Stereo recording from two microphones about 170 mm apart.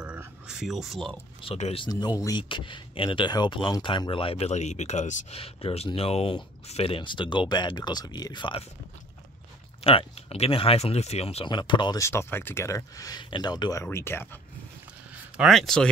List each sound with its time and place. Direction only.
0.0 s a sound: 10° right (ahead or behind)
1.4 s speech: 35° left (ahead or behind)
1.9 s speech: 20° left (ahead or behind)
9.8 s speech: 35° left (ahead or behind); by 14.2 s 15° left (ahead or behind)
15.3 s speech: centre (ahead or behind)